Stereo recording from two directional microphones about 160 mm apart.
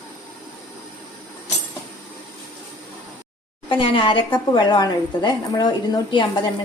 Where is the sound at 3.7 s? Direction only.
35° left (ahead or behind).